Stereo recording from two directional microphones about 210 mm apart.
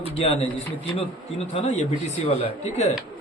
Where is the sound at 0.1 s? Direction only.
30° left (ahead or behind).